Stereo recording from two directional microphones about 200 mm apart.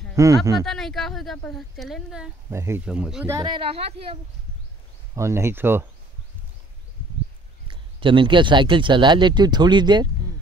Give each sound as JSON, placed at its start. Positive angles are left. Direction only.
{"t": 0.1, "sound": "speech", "side_deg": -15}
{"t": 0.7, "sound": "speech", "side_deg": 0}
{"t": 2.5, "sound": "speech", "side_deg": -15}
{"t": 3.3, "sound": "speech", "side_deg": -25}
{"t": 5.1, "sound": "speech", "side_deg": -15}
{"t": 7.6, "sound": "speech", "side_deg": -25}